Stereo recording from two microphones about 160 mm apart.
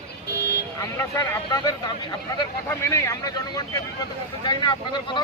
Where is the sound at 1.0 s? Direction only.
20° left (ahead or behind).